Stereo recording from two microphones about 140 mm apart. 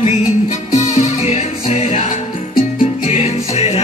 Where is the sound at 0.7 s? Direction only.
50° left (ahead or behind).